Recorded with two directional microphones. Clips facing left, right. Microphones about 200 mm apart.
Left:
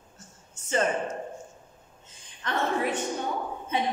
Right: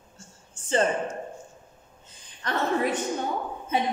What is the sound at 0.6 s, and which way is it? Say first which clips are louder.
Speech: right 2 dB; 30° right (ahead or behind).